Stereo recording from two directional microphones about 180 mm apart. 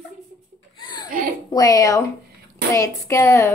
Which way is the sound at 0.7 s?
25° left (ahead or behind).